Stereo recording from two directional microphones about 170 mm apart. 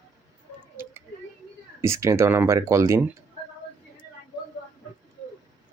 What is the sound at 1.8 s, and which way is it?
Speech, 15° right (ahead or behind).